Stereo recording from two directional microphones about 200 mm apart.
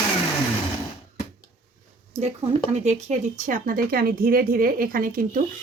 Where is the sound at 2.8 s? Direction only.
35° right (ahead or behind).